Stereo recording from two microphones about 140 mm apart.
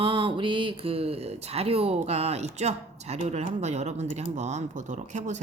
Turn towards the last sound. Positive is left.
turn(degrees=-60)  # may be behind; listen again after turning